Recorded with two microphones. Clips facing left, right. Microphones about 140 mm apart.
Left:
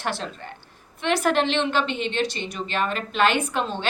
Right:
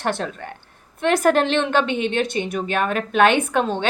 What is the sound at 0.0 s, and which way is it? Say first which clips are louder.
A woman's voice: right 5 dB; 50° right (ahead or behind).